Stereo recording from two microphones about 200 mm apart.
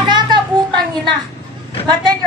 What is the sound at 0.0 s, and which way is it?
Children playing, 20° right (ahead or behind).